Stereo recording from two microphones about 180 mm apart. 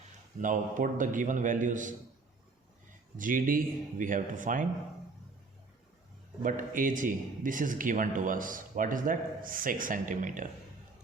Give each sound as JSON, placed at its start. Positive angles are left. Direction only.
{"t": 0.4, "sound": "a man's voice", "side_deg": -45}
{"t": 3.2, "sound": "a man's voice", "side_deg": -50}
{"t": 6.4, "sound": "a man's voice", "side_deg": -50}